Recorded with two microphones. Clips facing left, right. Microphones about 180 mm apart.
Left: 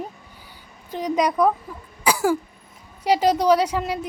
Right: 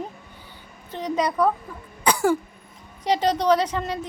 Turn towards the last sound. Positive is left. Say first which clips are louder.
# left 2 dB
turn(degrees=10)  # may be behind; listen again after turning